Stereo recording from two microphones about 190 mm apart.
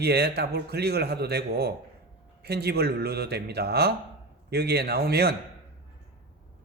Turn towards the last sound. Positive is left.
turn(degrees=-55)  # may be behind; listen again after turning